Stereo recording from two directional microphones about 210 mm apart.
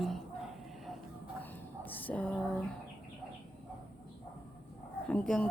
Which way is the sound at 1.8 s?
10° left (ahead or behind).